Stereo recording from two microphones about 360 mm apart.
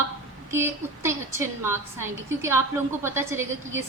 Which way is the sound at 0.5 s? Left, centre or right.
Centre.